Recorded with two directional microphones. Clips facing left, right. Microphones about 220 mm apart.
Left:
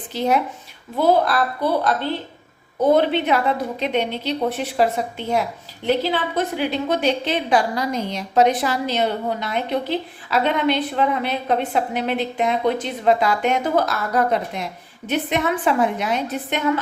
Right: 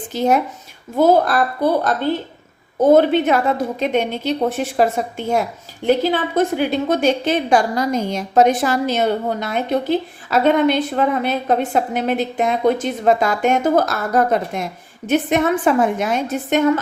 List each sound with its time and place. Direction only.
0.1 s a woman's voice: 45° right (ahead or behind)